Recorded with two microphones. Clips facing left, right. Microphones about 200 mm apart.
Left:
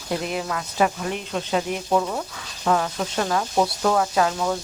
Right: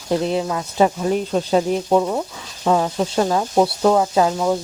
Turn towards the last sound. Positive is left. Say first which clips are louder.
# right 4 dB
turn(degrees=-20)  # may be behind; listen again after turning